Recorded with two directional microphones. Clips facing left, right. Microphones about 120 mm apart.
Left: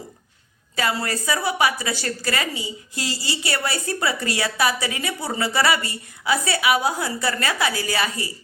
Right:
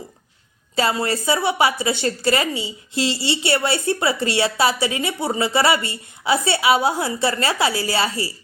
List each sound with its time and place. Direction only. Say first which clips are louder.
0.8 s a woman's voice: right 4 dB; 25° right (ahead or behind)